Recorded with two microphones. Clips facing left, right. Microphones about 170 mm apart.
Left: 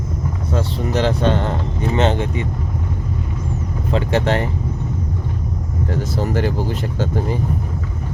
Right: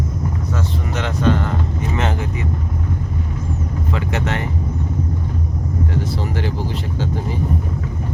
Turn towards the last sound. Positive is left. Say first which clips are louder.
# left 2 dB
turn(degrees=45)  # may be behind; listen again after turning